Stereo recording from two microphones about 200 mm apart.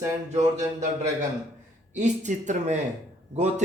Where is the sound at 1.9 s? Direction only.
35° right (ahead or behind).